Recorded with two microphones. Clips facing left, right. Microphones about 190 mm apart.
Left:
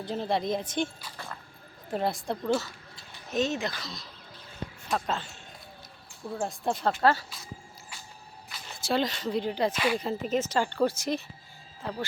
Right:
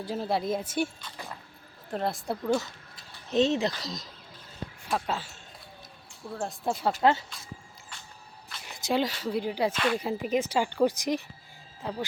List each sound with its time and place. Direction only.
0.0 s speech: 5° right (ahead or behind)
1.9 s speech: centre (ahead or behind)
3.3 s speech: 30° right (ahead or behind)
4.9 s speech: 5° right (ahead or behind)
7.0 s speech: 20° right (ahead or behind)
8.6 s speech: 15° right (ahead or behind)
9.7 s speech: 5° left (ahead or behind)
10.0 s speech: 10° right (ahead or behind)